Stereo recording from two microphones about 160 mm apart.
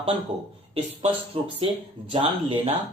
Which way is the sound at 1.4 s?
40° right (ahead or behind).